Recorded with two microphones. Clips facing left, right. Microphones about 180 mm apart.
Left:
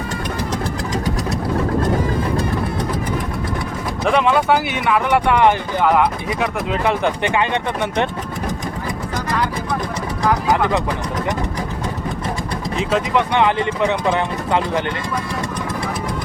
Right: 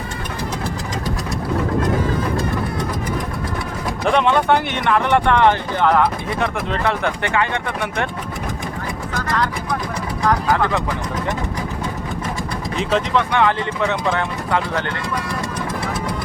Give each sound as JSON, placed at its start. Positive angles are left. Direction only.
{"t": 4.0, "sound": "speech", "side_deg": 0}
{"t": 9.1, "sound": "vehicle", "side_deg": 15}
{"t": 10.5, "sound": "speech", "side_deg": 15}
{"t": 12.7, "sound": "speech", "side_deg": 0}
{"t": 13.1, "sound": "speech", "side_deg": 20}